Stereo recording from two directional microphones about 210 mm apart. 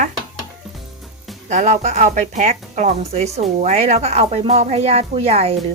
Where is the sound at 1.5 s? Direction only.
35° right (ahead or behind).